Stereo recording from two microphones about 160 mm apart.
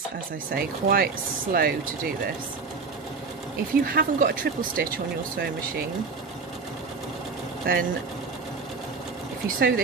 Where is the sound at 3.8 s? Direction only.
65° right (ahead or behind).